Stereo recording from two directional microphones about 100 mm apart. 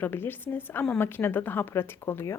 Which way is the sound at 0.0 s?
20° left (ahead or behind).